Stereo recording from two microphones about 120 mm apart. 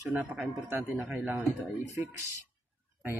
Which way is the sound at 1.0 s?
15° right (ahead or behind).